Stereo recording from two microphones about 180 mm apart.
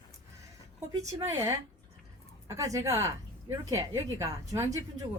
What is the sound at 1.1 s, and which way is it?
A woman's voice, 15° right (ahead or behind).